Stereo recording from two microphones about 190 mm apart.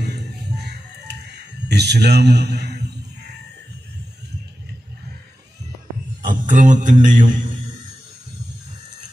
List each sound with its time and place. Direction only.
0.0 s music: 60° right (ahead or behind)
6.2 s a man's voice: 45° right (ahead or behind)